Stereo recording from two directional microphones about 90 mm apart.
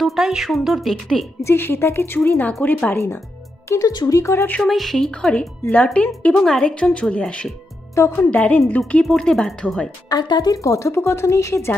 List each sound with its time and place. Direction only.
0.0 s speech: centre (ahead or behind)
1.4 s speech: 25° left (ahead or behind)
3.6 s speech: 30° left (ahead or behind)
3.9 s speech: 50° left (ahead or behind)
4.2 s speech: 30° left (ahead or behind)
4.6 s speech: centre (ahead or behind)
7.9 s a woman's voice: 30° left (ahead or behind)
8.3 s speech: 15° left (ahead or behind)
9.0 s speech: 5° left (ahead or behind)
10.0 s speech: 50° left (ahead or behind); by 11.7 s 30° left (ahead or behind)